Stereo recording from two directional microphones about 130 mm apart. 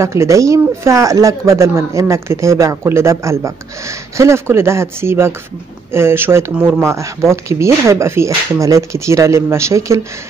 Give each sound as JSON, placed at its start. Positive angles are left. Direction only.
{"t": 0.0, "sound": "speech", "side_deg": -20}